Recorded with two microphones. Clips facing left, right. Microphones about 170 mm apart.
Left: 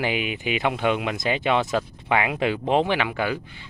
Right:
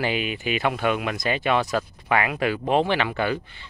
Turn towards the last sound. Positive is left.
turn(degrees=10)  # may be behind; listen again after turning